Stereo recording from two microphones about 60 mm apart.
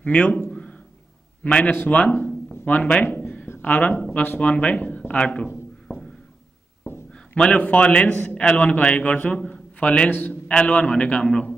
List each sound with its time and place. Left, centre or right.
0.0 s a man's voice: left
0.5 s a sound: centre
1.4 s a man's voice: left
3.0 s a sound: left
3.6 s a man's voice: left
7.1 s a man's voice: centre
8.2 s a man's voice: left
8.5 s a man's voice: centre